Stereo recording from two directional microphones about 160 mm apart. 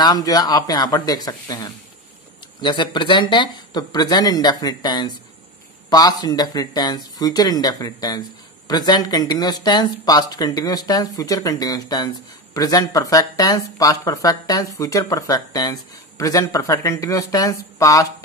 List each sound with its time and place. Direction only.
0.0 s speech: 25° left (ahead or behind)